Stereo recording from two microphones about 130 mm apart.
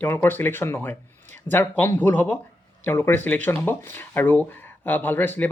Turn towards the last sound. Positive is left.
turn(degrees=15)  # may be behind; listen again after turning